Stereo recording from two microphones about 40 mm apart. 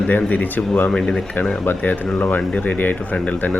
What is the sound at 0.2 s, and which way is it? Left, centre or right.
Speech, left.